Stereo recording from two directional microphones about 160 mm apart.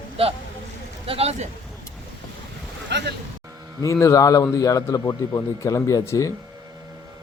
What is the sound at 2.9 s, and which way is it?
Speech, 90° right.